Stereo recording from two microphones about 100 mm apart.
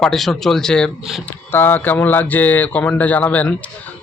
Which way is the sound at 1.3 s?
20° left (ahead or behind).